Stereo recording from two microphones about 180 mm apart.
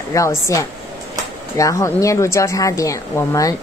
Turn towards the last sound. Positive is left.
turn(degrees=20)  # may be behind; listen again after turning